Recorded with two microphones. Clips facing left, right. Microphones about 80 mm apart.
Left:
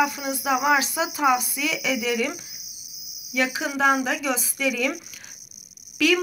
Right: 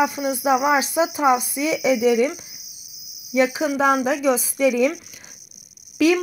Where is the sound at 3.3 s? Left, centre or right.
Right.